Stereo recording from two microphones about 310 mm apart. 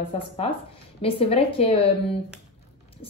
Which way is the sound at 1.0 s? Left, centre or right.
Centre.